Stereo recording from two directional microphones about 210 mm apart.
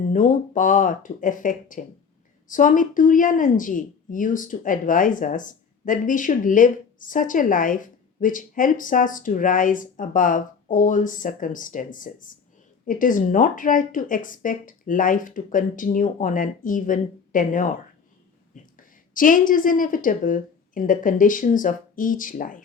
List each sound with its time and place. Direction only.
0.1 s a woman's voice: 40° left (ahead or behind)